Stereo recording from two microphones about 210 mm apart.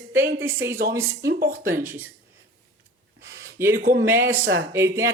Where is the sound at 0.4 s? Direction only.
10° right (ahead or behind).